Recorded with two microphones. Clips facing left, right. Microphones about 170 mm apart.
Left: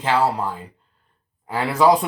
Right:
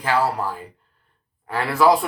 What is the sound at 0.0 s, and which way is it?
Speech, 20° left (ahead or behind).